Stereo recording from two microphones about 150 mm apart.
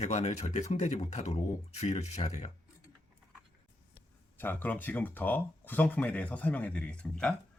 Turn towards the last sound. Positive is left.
turn(degrees=5)  # may be behind; listen again after turning